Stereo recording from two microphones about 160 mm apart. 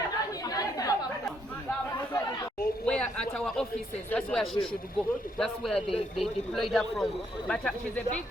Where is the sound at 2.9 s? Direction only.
5° left (ahead or behind).